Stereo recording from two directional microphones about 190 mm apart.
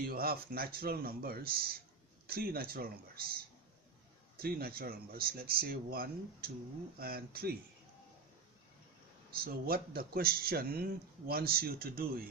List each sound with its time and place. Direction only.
0.1 s a man's voice: 50° right (ahead or behind)
4.4 s a man's voice: 50° right (ahead or behind)
9.4 s a man's voice: 50° right (ahead or behind)